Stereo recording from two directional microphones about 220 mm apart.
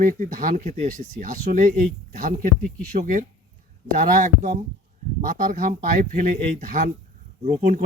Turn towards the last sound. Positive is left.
turn(degrees=-35)  # may be behind; listen again after turning